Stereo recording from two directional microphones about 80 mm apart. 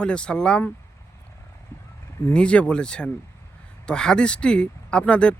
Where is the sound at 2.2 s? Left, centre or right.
Centre.